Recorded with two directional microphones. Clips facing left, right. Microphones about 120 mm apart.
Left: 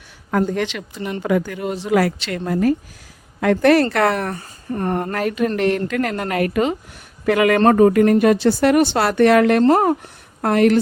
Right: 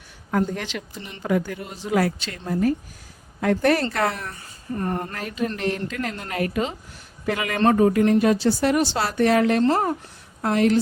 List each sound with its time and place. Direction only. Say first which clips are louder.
0.3 s speech: left 5 dB; 90° left; by 1.1 s 75° left (ahead or behind)
1.2 s speech: left 3 dB; 85° left
3.9 s speech: left 7 dB; 65° left (ahead or behind)
4.4 s speech: left 4 dB; 45° left (ahead or behind)
5.1 s speech: left 8 dB; 70° left (ahead or behind)